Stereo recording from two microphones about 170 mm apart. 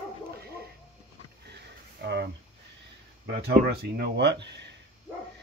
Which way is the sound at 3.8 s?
80° right.